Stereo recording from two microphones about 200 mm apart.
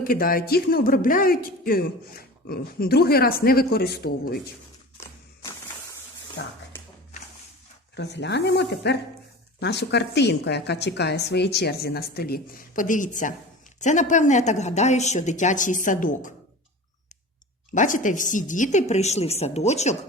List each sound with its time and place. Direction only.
0.0 s speech: 45° left (ahead or behind)
6.4 s a woman's voice: 65° left (ahead or behind)
7.9 s a woman's voice: 60° left (ahead or behind); by 16.3 s 40° left (ahead or behind)
17.7 s speech: 40° left (ahead or behind)